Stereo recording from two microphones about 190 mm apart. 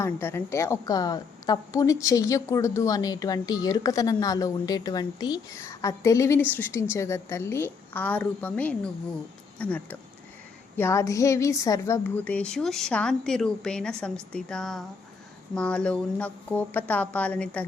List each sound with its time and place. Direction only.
0.0 s a woman's voice: 10° left (ahead or behind)